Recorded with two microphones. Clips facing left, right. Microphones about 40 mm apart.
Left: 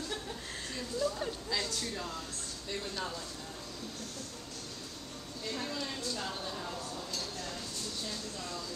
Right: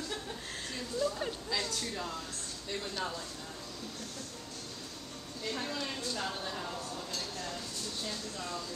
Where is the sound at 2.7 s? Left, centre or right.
Centre.